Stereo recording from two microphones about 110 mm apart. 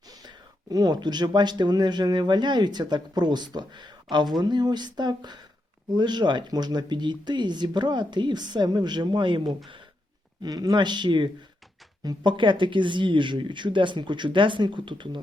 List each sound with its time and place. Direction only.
0.1 s speech: 35° right (ahead or behind)